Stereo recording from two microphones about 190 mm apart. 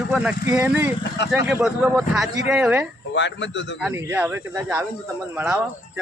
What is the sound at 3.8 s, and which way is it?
A man's voice, 10° right (ahead or behind).